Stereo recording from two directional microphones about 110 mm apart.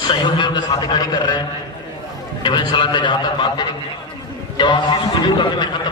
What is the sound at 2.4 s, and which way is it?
A man's voice, 45° left (ahead or behind).